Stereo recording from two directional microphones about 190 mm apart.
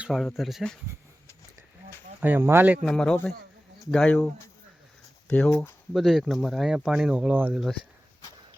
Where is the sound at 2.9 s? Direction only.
5° left (ahead or behind).